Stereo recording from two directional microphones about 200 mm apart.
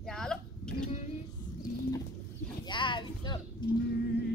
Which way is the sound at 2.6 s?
25° left (ahead or behind).